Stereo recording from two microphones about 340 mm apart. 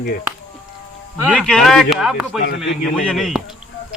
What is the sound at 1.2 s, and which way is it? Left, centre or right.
Speech, centre.